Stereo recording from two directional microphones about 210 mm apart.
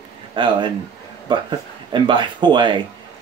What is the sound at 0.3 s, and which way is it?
Speech, 20° right (ahead or behind).